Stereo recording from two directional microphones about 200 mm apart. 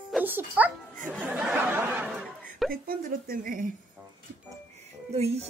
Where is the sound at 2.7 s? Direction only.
45° right (ahead or behind).